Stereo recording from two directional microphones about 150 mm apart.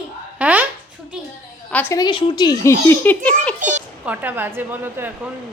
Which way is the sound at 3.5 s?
55° right (ahead or behind).